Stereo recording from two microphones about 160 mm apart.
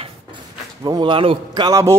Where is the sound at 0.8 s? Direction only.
25° right (ahead or behind).